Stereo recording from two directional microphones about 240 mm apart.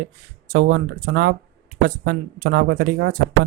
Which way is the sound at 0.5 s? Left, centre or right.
Right.